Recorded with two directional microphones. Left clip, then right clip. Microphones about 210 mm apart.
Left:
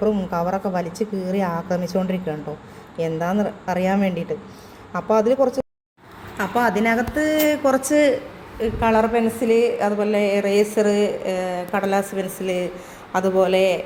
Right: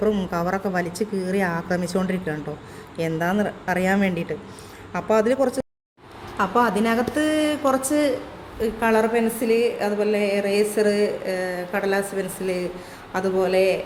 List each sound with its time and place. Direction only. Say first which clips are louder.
0.0 s speech: left 1 dB; 5° right (ahead or behind)
6.3 s a woman's voice: even; 15° right (ahead or behind)
6.8 s speech: left 2 dB; centre (ahead or behind)
7.9 s a woman's voice: left 5 dB; 15° left (ahead or behind)
8.6 s a woman's voice: left 2 dB; 5° right (ahead or behind)